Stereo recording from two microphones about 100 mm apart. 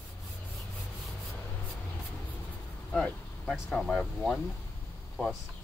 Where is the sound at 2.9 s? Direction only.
10° left (ahead or behind).